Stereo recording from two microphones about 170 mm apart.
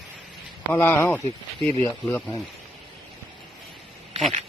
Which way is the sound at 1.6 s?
35° right (ahead or behind).